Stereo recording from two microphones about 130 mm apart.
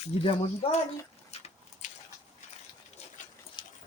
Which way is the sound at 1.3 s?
55° left (ahead or behind).